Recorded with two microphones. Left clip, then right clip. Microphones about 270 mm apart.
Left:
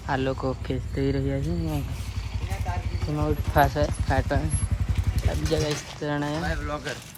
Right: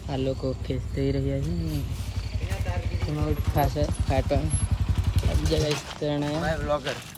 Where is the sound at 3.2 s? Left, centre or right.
Left.